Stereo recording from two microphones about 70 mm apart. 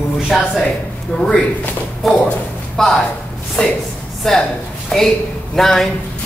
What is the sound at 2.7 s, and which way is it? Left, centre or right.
Speech, centre.